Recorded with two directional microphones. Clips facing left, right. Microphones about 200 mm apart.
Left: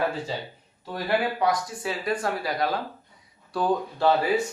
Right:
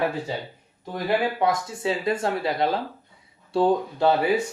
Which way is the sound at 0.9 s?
20° right (ahead or behind).